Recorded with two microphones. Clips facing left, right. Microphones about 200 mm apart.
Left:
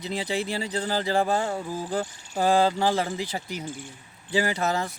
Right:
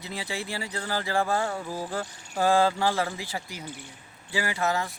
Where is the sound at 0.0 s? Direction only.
20° left (ahead or behind).